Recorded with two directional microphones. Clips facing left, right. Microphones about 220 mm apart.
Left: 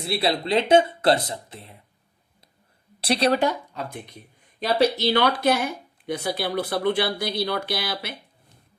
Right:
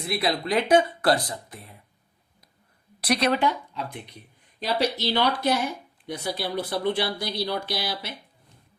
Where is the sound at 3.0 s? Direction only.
30° left (ahead or behind).